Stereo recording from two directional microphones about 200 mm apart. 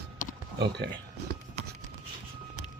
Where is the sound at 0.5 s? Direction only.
55° right (ahead or behind).